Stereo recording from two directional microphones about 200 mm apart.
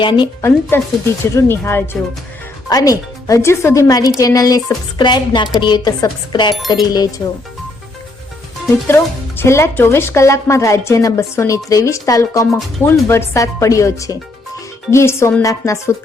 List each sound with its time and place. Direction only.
0.0 s speech: 25° left (ahead or behind)
0.7 s a woman's voice: 15° left (ahead or behind)
9.4 s a woman's voice: 10° left (ahead or behind)